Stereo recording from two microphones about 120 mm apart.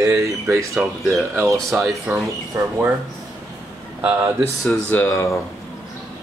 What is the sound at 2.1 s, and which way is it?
Speech, 20° right (ahead or behind).